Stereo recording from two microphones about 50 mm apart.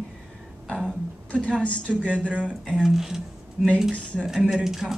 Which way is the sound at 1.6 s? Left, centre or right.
Left.